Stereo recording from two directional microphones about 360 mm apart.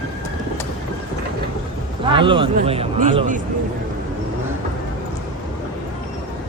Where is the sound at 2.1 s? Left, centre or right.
Centre.